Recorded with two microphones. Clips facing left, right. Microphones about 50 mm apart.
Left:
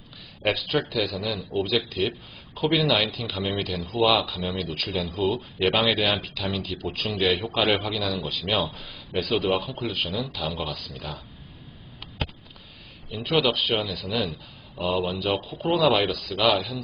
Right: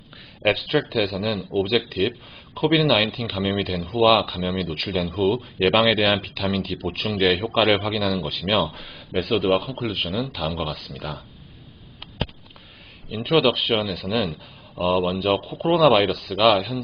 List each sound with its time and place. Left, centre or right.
0.4 s speech: right
13.1 s speech: right
14.9 s speech: centre
15.8 s speech: right